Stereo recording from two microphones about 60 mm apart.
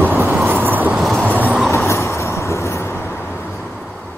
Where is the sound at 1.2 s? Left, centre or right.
Right.